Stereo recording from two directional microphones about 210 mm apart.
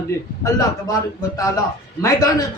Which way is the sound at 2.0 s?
15° left (ahead or behind).